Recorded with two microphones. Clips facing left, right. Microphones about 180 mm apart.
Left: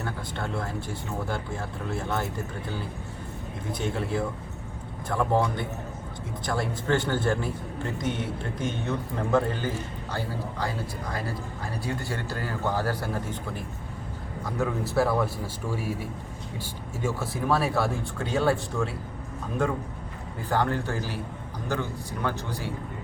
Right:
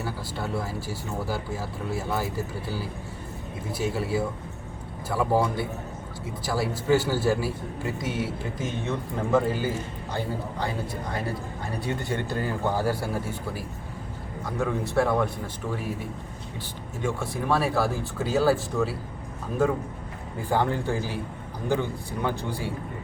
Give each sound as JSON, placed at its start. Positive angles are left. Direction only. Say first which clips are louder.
{"t": 0.0, "sound": "a man's voice", "louder": "right 1 dB", "side_deg": -5}
{"t": 11.9, "sound": "a man's voice", "louder": "right 3 dB", "side_deg": -20}
{"t": 17.0, "sound": "a man's voice", "louder": "even", "side_deg": 5}
{"t": 20.5, "sound": "a man's voice", "louder": "right 1 dB", "side_deg": -15}